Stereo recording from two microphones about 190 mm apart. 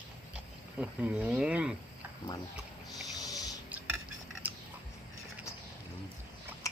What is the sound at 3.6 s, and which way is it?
Cutlery, 10° right (ahead or behind).